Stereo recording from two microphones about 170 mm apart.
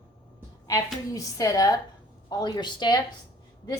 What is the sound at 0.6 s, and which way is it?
A woman's voice, 20° left (ahead or behind).